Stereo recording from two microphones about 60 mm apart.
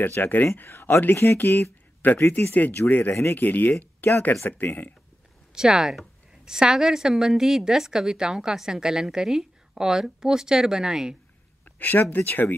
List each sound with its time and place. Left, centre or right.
0.1 s speech: left
0.7 s speech: left
2.0 s a man's voice: left
5.5 s a woman's voice: centre
11.8 s speech: left